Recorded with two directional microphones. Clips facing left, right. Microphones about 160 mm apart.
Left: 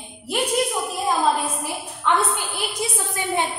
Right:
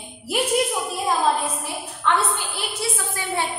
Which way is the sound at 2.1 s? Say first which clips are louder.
Left 1 dB; 15° left (ahead or behind).